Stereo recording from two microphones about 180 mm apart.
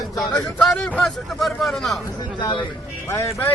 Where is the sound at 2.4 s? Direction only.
25° left (ahead or behind).